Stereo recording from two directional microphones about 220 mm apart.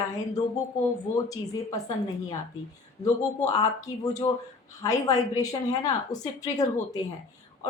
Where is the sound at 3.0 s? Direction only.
15° left (ahead or behind).